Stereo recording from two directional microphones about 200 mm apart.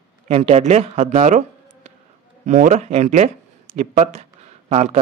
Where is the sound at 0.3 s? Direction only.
30° right (ahead or behind).